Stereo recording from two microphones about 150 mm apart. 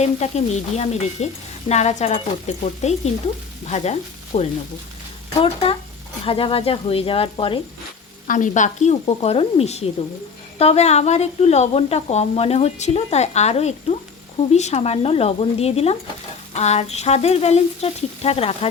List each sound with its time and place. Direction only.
0.0 s speech: 50° left (ahead or behind)
3.7 s sizzle: 45° left (ahead or behind)
5.4 s speech: 35° left (ahead or behind)
8.3 s speech: 60° left (ahead or behind); by 18.7 s 40° left (ahead or behind)